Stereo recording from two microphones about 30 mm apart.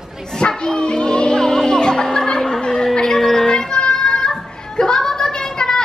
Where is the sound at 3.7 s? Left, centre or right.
Left.